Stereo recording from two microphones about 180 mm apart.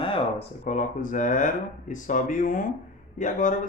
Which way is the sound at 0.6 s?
45° left (ahead or behind).